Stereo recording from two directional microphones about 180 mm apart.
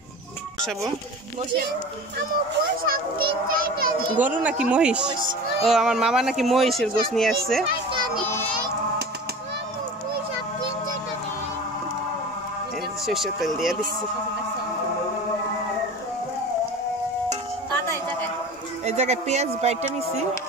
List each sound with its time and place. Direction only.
2.8 s a child's voice: 55° right (ahead or behind)
4.2 s speech: 10° right (ahead or behind)
13.0 s speech: centre (ahead or behind)
18.9 s a man's voice: 40° right (ahead or behind)